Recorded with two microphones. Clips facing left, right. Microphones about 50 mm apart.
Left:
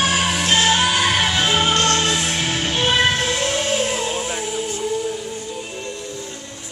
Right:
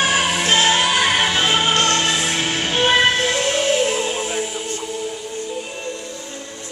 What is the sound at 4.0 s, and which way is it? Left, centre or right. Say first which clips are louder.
Music: right 1 dB; centre.